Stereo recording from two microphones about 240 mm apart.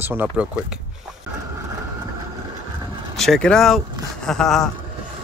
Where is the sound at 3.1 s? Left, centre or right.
Centre.